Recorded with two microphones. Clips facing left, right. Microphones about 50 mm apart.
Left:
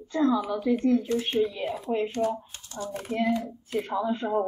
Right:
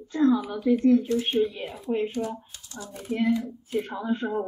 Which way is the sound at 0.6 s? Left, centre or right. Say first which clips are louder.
Right 2 dB; left.